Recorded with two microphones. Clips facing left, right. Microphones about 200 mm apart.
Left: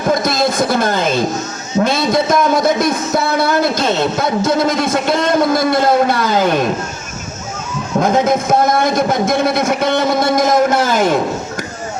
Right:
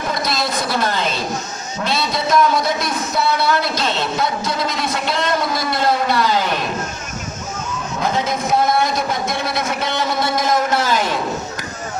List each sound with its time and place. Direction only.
0.1 s a sound: 50° left (ahead or behind)
1.8 s a man's voice: 50° left (ahead or behind)
7.9 s a man's voice: 50° left (ahead or behind)